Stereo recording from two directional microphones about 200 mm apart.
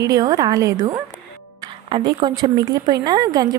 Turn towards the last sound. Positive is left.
turn(degrees=-20)  # may be behind; listen again after turning